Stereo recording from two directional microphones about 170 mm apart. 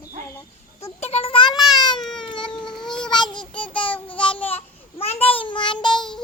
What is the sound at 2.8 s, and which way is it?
Child singing, 25° left (ahead or behind).